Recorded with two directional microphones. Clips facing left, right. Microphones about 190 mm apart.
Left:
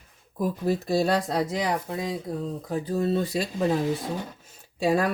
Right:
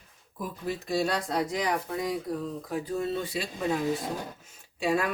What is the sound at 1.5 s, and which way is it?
Speech, 25° left (ahead or behind).